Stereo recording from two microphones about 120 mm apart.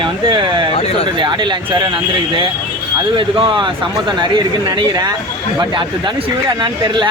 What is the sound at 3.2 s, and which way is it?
Speech, 45° right (ahead or behind).